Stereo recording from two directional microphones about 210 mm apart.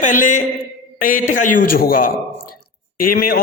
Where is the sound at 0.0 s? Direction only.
35° left (ahead or behind).